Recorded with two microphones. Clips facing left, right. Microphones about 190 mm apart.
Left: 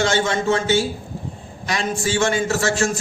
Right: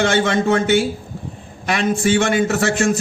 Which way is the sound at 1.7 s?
60° right (ahead or behind).